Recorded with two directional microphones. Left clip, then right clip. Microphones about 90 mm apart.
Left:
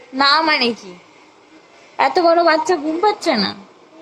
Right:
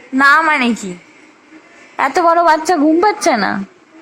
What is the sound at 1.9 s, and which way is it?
A woman's voice, 40° right (ahead or behind).